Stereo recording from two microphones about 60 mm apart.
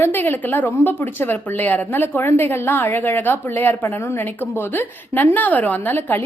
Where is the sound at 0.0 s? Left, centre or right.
Left.